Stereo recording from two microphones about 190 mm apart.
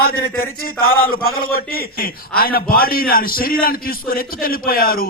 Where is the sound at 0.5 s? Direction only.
90° left.